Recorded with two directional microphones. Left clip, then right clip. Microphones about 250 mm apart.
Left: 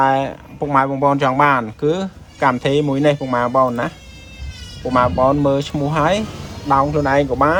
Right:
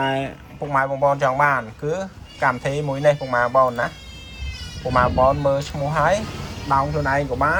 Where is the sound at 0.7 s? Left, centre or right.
Left.